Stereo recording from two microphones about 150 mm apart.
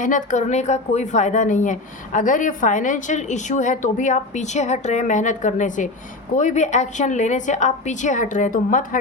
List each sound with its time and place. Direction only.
0.0 s a woman's voice: 60° left (ahead or behind)